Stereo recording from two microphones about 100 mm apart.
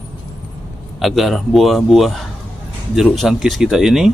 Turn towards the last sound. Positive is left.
turn(degrees=-5)  # may be behind; listen again after turning